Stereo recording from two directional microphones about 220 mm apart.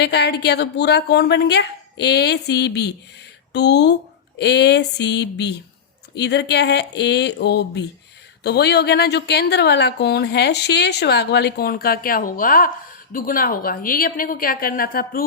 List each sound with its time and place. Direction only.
0.0 s a woman's voice: 50° left (ahead or behind)